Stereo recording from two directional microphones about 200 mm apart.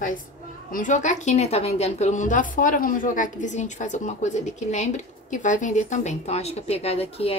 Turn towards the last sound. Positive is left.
turn(degrees=30)  # may be behind; listen again after turning